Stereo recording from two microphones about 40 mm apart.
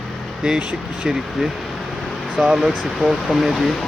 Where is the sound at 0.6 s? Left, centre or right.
Right.